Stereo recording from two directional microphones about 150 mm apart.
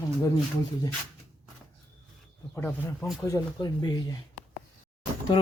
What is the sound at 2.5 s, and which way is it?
Speech, 15° left (ahead or behind).